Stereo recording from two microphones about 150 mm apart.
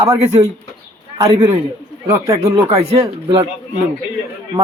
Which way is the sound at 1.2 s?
25° right (ahead or behind).